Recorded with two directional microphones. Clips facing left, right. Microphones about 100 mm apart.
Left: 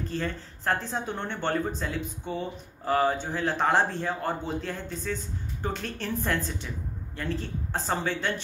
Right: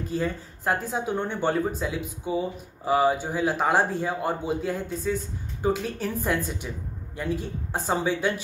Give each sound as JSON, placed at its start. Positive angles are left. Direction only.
{"t": 0.1, "sound": "speech", "side_deg": -10}